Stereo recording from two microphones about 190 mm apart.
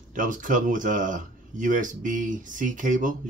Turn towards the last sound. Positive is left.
turn(degrees=-45)  # may be behind; listen again after turning